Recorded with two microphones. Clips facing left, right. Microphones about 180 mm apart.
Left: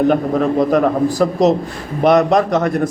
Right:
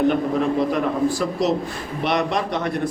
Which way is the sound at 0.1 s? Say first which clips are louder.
Left 5 dB; 45° left (ahead or behind).